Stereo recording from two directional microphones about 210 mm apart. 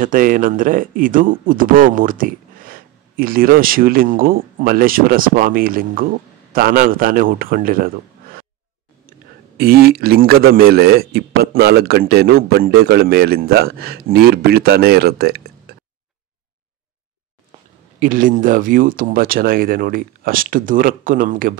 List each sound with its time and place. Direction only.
0.0 s a man's voice: 40° right (ahead or behind)
9.6 s a man's voice: 45° right (ahead or behind)
18.0 s speech: 40° right (ahead or behind)